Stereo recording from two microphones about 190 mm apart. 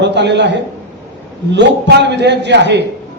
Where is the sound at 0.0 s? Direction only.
65° right (ahead or behind).